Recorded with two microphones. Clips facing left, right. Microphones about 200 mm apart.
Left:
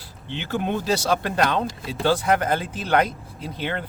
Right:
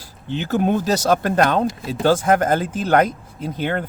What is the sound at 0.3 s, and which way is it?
Speech, 40° right (ahead or behind).